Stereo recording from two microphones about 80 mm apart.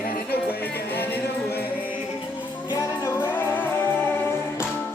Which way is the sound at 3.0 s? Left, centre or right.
Left.